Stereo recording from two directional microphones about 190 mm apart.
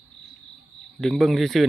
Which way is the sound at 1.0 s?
Centre (ahead or behind).